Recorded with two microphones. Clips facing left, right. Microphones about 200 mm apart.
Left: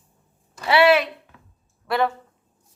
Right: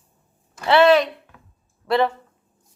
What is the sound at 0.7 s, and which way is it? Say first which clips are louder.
Speech: right 2 dB; 10° left (ahead or behind).